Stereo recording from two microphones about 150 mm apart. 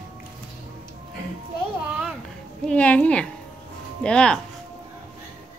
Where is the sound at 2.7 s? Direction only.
10° left (ahead or behind).